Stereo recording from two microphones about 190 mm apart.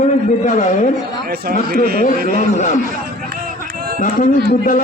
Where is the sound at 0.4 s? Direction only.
40° left (ahead or behind).